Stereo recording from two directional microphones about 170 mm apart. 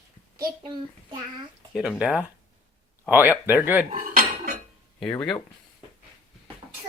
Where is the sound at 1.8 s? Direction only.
5° right (ahead or behind).